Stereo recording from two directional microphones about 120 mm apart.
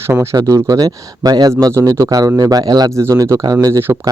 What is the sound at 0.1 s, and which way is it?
Speech, 20° right (ahead or behind).